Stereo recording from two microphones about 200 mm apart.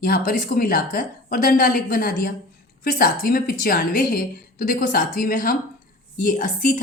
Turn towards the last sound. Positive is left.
turn(degrees=40)  # may be behind; listen again after turning